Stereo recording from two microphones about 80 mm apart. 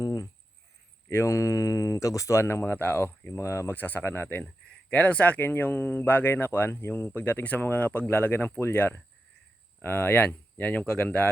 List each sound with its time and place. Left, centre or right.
0.0 s a sound: left
1.1 s speech: left
3.8 s speech: left